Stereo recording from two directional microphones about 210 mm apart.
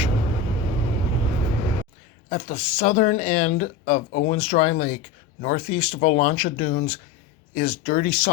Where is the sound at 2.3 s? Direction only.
35° left (ahead or behind).